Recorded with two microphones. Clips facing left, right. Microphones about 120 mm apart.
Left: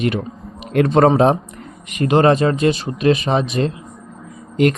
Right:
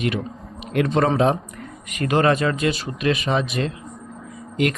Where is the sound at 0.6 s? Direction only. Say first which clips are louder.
Left 6 dB; 45° left (ahead or behind).